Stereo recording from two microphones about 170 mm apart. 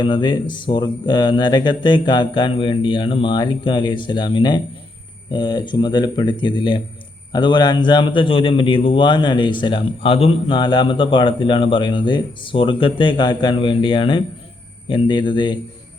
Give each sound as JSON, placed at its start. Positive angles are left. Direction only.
{"t": 0.0, "sound": "a man's voice", "side_deg": 30}